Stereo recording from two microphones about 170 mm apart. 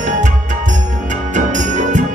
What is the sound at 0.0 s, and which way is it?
Music, 45° right (ahead or behind).